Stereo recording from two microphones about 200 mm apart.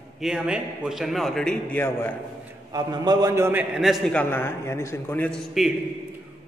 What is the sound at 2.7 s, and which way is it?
A man's voice, 20° right (ahead or behind).